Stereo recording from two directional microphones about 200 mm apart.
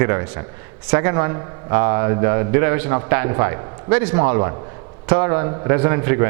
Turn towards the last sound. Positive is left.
turn(degrees=-15)  # may be behind; listen again after turning